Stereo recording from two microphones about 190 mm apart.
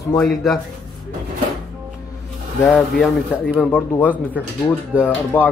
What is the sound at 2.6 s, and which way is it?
Speech, 5° left (ahead or behind).